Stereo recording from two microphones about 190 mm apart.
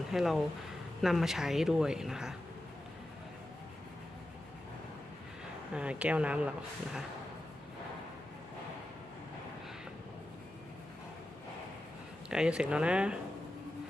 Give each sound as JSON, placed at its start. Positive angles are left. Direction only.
{"t": 0.1, "sound": "speech", "side_deg": 0}
{"t": 5.7, "sound": "speech", "side_deg": -5}
{"t": 12.3, "sound": "speech", "side_deg": -5}